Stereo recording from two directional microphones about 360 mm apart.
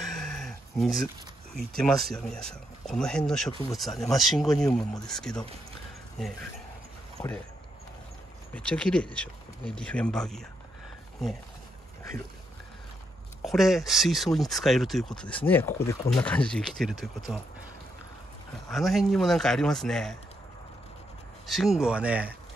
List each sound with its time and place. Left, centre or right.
0.1 s dog: centre
1.5 s speech: centre
8.5 s speech: centre
13.4 s speech: centre
18.7 s speech: centre
21.5 s speech: centre